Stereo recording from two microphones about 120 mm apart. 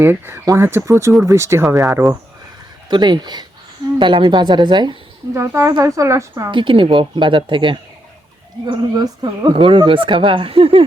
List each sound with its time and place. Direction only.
0.0 s speech: 20° right (ahead or behind)
2.9 s a woman's voice: 40° right (ahead or behind)
5.3 s speech: 25° right (ahead or behind)
6.3 s speech: 40° right (ahead or behind)